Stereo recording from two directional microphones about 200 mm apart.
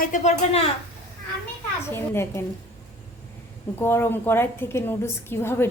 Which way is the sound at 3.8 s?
10° left (ahead or behind).